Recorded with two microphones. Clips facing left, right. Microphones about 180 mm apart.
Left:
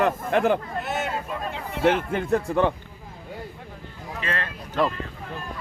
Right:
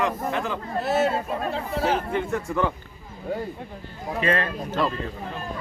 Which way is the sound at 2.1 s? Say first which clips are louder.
Left 3 dB; 35° left (ahead or behind).